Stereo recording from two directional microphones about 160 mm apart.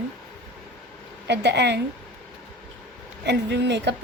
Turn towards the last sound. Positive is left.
turn(degrees=-90)